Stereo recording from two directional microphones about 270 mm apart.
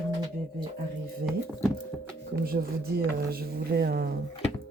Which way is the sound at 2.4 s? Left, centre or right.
Right.